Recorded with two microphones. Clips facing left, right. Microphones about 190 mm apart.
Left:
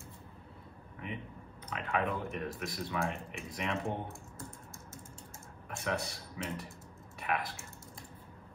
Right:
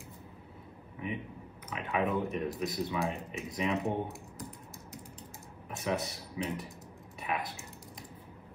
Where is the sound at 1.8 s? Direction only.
25° right (ahead or behind).